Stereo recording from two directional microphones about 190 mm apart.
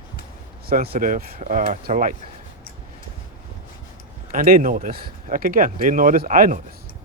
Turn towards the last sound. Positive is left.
turn(degrees=-45)  # may be behind; listen again after turning